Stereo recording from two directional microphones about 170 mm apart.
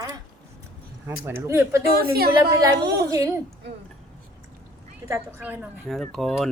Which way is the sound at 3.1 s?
20° right (ahead or behind).